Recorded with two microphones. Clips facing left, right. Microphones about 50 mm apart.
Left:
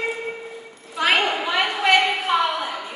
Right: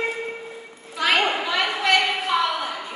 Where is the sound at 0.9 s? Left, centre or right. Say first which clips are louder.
Left 1 dB; centre.